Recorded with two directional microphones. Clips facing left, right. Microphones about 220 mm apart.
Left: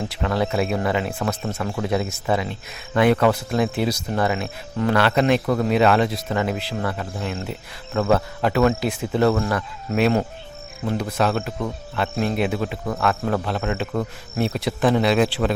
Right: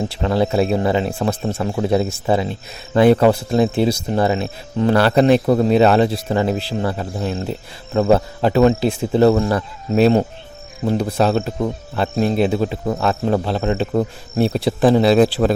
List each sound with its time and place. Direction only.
0.1 s speech: 30° right (ahead or behind)